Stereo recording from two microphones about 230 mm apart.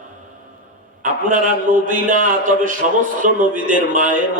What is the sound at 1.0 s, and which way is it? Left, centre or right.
A man's voice, right.